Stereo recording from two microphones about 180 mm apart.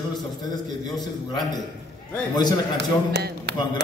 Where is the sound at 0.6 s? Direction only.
20° left (ahead or behind).